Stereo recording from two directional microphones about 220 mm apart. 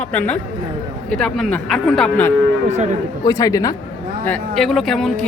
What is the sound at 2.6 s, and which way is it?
Speech, 30° right (ahead or behind).